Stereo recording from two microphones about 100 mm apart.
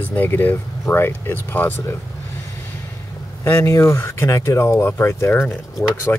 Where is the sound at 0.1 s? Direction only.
20° left (ahead or behind).